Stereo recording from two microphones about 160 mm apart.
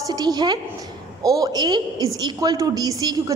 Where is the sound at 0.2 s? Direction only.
25° right (ahead or behind).